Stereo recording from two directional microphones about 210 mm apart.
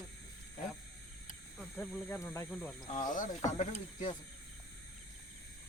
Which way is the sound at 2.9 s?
40° left (ahead or behind).